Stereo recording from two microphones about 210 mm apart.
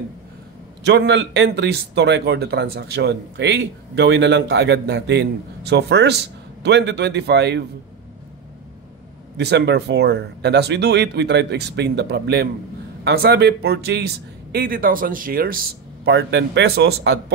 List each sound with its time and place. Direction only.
0.8 s speech: 55° right (ahead or behind)
9.4 s speech: 50° right (ahead or behind)
16.1 s speech: 55° right (ahead or behind)